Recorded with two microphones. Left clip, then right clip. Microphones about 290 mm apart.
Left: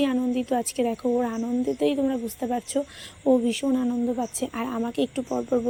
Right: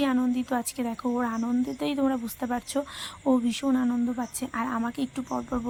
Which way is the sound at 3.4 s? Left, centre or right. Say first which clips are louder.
Left 2 dB; centre.